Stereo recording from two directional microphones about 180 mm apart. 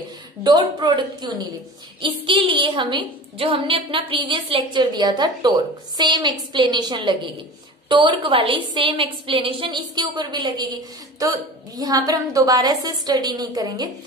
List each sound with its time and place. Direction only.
0.4 s a woman's voice: 25° right (ahead or behind)